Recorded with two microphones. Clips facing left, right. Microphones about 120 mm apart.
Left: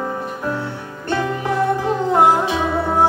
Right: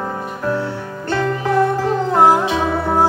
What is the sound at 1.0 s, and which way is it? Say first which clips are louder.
Music: right 2 dB; 20° left (ahead or behind).